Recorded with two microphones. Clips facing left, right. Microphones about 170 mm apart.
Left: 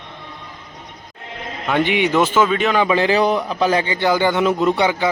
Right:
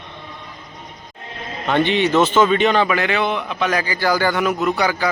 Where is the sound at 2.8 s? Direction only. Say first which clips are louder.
Left 4 dB; 30° left (ahead or behind).